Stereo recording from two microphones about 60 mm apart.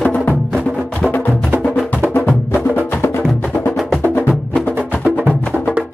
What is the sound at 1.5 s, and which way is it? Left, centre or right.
Music, right.